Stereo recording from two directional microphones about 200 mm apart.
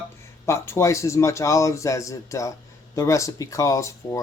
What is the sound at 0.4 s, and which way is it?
Speech, 15° left (ahead or behind).